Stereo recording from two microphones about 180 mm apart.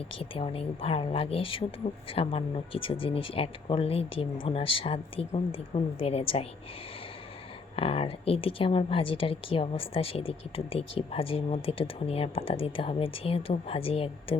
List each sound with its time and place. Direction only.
0.2 s a woman's voice: 30° left (ahead or behind)
7.8 s a woman's voice: 30° left (ahead or behind)